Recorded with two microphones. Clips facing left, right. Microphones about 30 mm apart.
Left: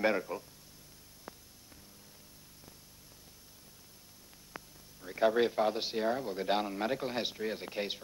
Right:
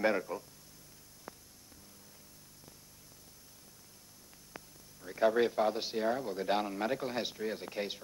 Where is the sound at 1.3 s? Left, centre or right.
Centre.